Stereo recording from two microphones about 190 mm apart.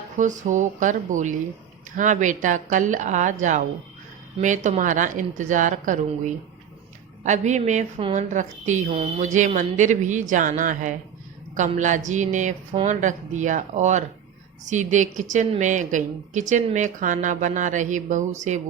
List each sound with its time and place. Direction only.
0.2 s a woman's voice: 40° right (ahead or behind)